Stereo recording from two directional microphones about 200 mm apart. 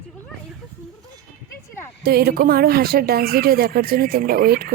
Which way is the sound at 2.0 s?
50° right (ahead or behind).